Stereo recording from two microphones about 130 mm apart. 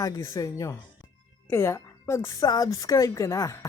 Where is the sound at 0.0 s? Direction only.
25° left (ahead or behind).